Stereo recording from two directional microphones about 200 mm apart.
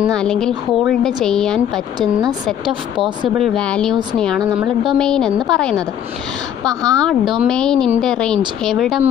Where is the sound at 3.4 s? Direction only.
5° left (ahead or behind).